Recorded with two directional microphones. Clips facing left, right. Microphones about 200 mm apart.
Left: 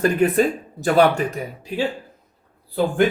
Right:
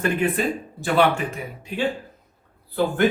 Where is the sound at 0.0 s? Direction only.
40° left (ahead or behind).